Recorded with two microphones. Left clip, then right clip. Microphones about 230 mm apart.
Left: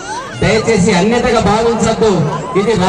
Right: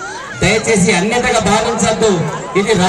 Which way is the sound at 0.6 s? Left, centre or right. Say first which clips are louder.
Left 1 dB; right.